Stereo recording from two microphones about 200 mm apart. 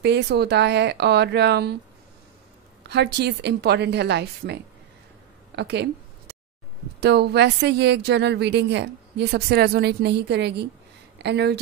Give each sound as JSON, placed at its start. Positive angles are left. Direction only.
{"t": 0.0, "sound": "a woman's voice", "side_deg": -55}
{"t": 2.9, "sound": "a woman's voice", "side_deg": -55}
{"t": 5.6, "sound": "a sound", "side_deg": -60}
{"t": 7.0, "sound": "a woman's voice", "side_deg": -55}